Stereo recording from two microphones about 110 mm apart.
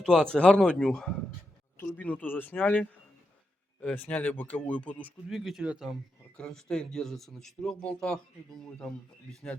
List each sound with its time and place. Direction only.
0.0 s speech: 5° left (ahead or behind)
5.3 s a man's voice: centre (ahead or behind)
6.3 s a man's voice: 5° left (ahead or behind)